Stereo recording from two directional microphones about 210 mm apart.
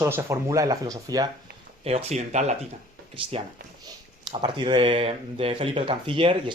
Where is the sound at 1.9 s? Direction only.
30° right (ahead or behind).